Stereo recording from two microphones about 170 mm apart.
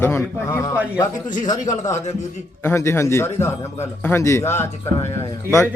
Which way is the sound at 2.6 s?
15° left (ahead or behind).